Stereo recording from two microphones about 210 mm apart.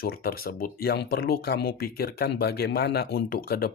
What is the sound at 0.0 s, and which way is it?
Speech, 45° left (ahead or behind).